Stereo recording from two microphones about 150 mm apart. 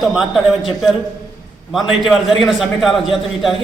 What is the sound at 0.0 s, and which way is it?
Speech, centre (ahead or behind).